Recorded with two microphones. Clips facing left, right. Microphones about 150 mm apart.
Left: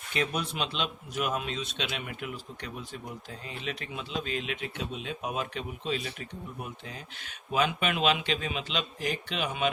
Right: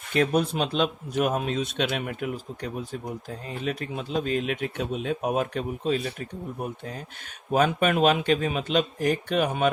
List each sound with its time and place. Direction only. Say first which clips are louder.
0.1 s speech: right 8 dB; 45° right (ahead or behind)